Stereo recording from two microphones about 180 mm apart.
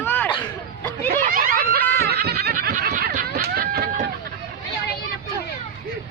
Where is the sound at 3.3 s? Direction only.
60° right (ahead or behind).